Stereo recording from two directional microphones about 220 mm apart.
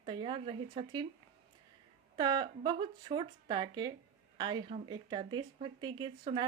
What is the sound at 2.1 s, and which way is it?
Speech, 20° right (ahead or behind).